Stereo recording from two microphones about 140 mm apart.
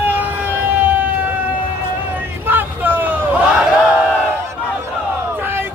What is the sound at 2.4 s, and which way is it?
Battle cry, 15° right (ahead or behind).